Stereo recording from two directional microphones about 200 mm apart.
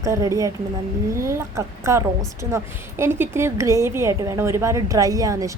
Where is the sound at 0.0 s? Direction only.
15° right (ahead or behind).